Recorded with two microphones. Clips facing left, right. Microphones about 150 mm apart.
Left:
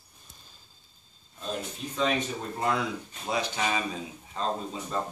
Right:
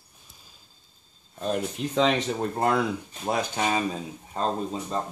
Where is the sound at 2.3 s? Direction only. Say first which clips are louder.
Right 5 dB; 50° right (ahead or behind).